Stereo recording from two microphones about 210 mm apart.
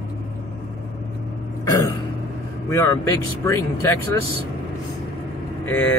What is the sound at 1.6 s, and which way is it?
Throat clearing, 15° left (ahead or behind).